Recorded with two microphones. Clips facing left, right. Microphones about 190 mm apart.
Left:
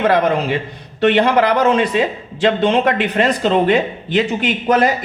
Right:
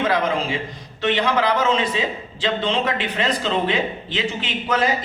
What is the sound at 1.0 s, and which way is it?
A man's voice, 60° left (ahead or behind).